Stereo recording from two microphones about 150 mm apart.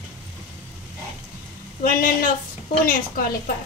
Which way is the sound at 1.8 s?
70° left (ahead or behind).